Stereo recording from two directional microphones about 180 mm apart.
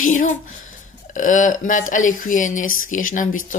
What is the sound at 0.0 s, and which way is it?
Speech, 45° left (ahead or behind).